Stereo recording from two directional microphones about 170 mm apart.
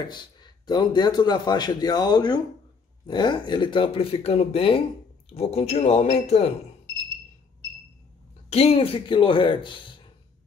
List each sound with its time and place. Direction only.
0.1 s a man's voice: 25° left (ahead or behind)
8.5 s speech: 35° left (ahead or behind)